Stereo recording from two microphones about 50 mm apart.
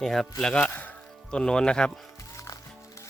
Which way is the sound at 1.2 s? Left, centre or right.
Centre.